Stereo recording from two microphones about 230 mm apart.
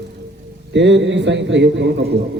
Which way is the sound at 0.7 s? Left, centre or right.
Right.